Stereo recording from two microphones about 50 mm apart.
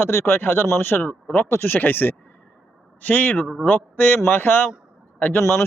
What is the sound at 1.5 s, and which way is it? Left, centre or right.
A man's voice, left.